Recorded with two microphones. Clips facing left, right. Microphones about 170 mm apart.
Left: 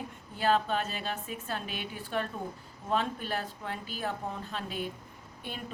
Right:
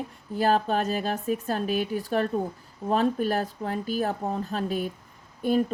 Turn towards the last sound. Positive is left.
turn(degrees=-40)  # may be behind; listen again after turning